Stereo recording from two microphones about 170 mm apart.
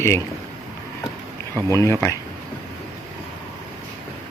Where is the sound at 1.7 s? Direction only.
15° left (ahead or behind).